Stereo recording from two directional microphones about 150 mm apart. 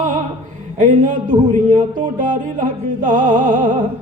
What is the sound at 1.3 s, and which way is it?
Speech, 30° right (ahead or behind).